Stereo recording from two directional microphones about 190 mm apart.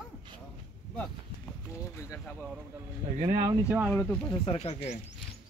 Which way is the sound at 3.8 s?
5° left (ahead or behind).